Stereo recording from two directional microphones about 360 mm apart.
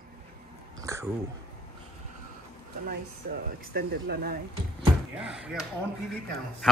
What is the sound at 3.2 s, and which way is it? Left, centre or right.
Speech, right.